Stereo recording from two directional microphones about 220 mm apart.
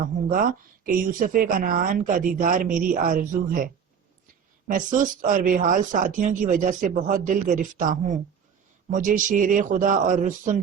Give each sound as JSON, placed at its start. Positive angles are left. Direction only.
{"t": 0.0, "sound": "speech", "side_deg": -40}
{"t": 4.7, "sound": "speech", "side_deg": -35}